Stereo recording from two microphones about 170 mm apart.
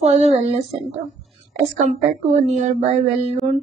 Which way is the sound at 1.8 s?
40° right (ahead or behind).